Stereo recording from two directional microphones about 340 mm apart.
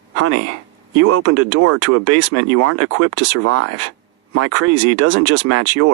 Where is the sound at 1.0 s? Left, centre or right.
Right.